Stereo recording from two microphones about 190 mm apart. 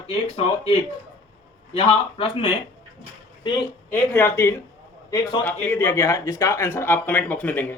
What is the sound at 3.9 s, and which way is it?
Speech, 10° left (ahead or behind).